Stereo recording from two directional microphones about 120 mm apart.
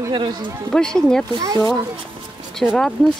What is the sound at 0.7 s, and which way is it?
Speech, 5° left (ahead or behind).